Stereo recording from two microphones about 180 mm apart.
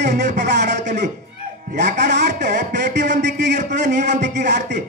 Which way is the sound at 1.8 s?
70° right (ahead or behind).